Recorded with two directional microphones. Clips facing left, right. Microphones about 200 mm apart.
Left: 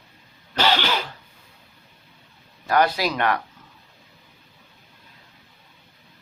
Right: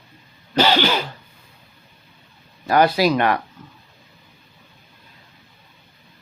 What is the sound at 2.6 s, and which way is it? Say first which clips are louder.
Speech: right 4 dB; 5° right (ahead or behind).